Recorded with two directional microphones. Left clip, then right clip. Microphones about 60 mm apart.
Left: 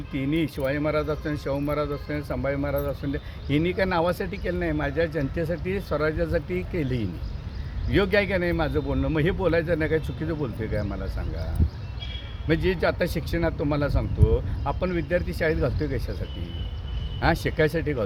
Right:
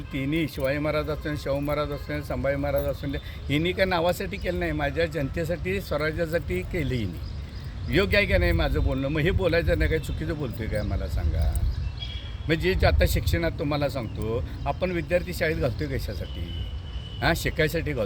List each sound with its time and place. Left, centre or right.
0.1 s speech: centre
12.5 s speech: left
17.2 s speech: left